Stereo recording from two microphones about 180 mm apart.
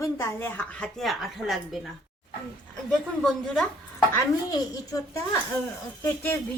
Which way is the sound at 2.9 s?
5° left (ahead or behind).